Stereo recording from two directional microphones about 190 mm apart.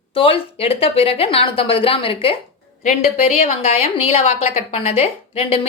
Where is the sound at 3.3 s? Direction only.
35° left (ahead or behind).